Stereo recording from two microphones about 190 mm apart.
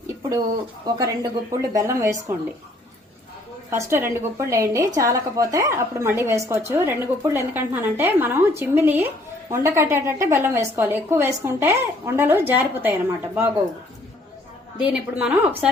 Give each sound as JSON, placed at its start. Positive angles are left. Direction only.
{"t": 0.2, "sound": "a sound", "side_deg": -20}
{"t": 0.9, "sound": "a woman's voice", "side_deg": -20}
{"t": 3.7, "sound": "a woman's voice", "side_deg": -15}
{"t": 14.8, "sound": "a woman's voice", "side_deg": -5}